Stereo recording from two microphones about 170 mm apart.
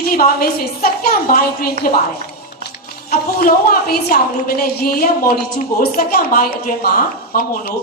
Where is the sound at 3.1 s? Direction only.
60° left (ahead or behind).